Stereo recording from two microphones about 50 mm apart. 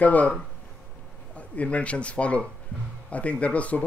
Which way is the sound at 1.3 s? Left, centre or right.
Left.